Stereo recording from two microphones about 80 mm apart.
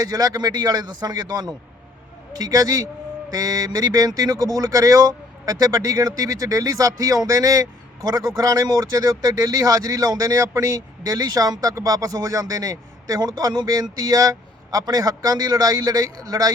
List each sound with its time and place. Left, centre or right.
0.0 s a man's voice: right